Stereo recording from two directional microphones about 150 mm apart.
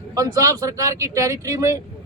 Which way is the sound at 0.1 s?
20° right (ahead or behind).